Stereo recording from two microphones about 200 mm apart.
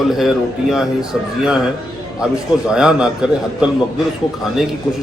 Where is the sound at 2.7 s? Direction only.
5° right (ahead or behind).